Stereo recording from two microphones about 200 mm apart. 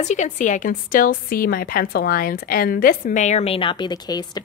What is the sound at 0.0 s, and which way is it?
A woman's voice, 35° left (ahead or behind).